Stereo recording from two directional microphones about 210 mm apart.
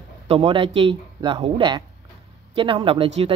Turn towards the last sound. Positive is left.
turn(degrees=-25)  # may be behind; listen again after turning